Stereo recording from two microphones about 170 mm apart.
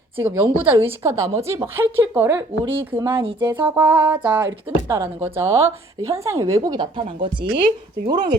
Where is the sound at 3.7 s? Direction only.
10° right (ahead or behind).